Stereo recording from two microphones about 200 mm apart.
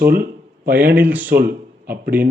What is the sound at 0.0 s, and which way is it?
Speech, 50° right (ahead or behind).